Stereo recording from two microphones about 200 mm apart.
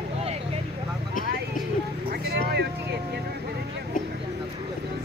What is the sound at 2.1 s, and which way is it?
Vehicle, 50° right (ahead or behind).